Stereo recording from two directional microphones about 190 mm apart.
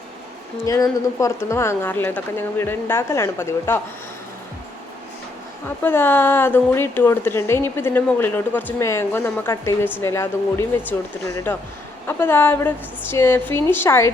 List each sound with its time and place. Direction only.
0.6 s a woman's voice: 15° left (ahead or behind)
5.8 s a woman's voice: 10° left (ahead or behind)